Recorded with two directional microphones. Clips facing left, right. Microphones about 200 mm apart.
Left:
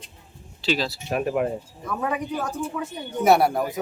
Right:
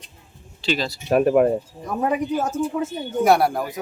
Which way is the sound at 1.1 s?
45° right (ahead or behind).